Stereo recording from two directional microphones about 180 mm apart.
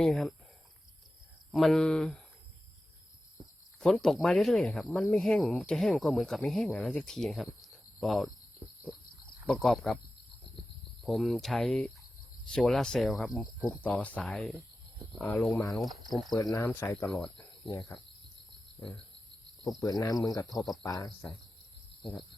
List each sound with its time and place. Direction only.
0.0 s speech: centre (ahead or behind)
1.5 s speech: centre (ahead or behind)
3.8 s speech: centre (ahead or behind)
9.5 s speech: centre (ahead or behind)
11.0 s speech: centre (ahead or behind)
19.8 s speech: 20° left (ahead or behind)